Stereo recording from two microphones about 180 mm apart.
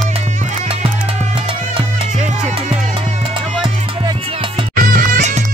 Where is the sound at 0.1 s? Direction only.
40° right (ahead or behind).